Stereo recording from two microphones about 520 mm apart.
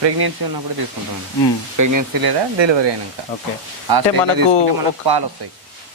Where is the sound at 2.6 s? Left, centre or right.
Right.